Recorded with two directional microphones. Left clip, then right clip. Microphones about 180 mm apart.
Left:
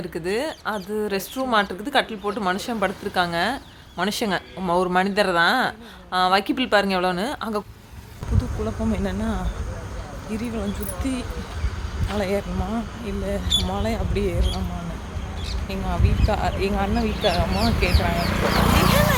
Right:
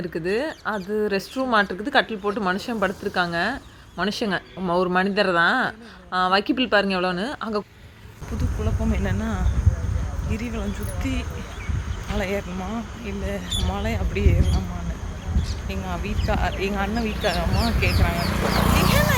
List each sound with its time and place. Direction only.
0.1 s a woman's voice: 10° right (ahead or behind)
8.6 s a woman's voice: centre (ahead or behind)
15.7 s a woman's voice: centre (ahead or behind)
18.2 s speech: 45° right (ahead or behind)
18.8 s a sound: centre (ahead or behind)